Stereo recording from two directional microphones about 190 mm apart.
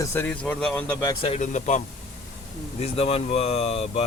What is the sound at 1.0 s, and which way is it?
Speech, 30° left (ahead or behind).